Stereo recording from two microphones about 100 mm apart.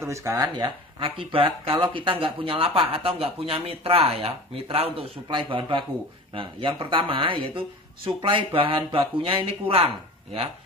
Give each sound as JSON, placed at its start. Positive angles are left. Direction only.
{"t": 0.0, "sound": "speech", "side_deg": -30}
{"t": 0.6, "sound": "speech", "side_deg": -60}